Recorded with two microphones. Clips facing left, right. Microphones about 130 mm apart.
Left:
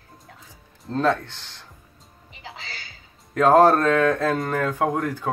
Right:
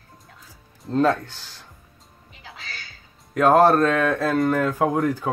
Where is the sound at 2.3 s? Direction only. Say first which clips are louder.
Left 2 dB; 25° left (ahead or behind).